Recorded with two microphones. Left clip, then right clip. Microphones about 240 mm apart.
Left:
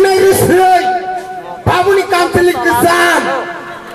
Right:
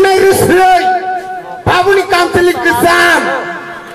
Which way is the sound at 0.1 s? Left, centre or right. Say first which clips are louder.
Right 1 dB; centre.